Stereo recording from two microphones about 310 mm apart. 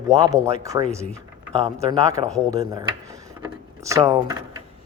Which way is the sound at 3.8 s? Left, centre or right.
Centre.